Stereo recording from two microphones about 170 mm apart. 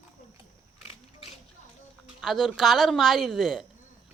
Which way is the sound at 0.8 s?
35° left (ahead or behind).